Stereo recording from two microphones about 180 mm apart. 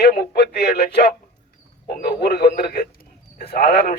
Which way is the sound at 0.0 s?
60° left (ahead or behind).